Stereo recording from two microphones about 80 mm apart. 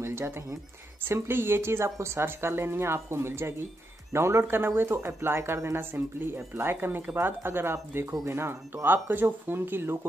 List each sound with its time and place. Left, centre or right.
0.0 s speech: right